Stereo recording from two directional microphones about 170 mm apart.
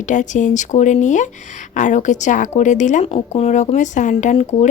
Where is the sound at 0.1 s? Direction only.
45° left (ahead or behind).